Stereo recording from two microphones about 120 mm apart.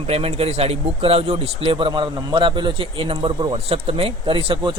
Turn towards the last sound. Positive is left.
turn(degrees=-45)  # may be behind; listen again after turning